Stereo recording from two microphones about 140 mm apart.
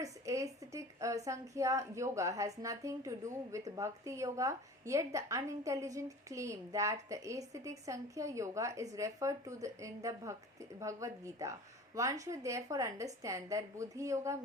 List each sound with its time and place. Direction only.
0.0 s a woman's voice: 25° right (ahead or behind)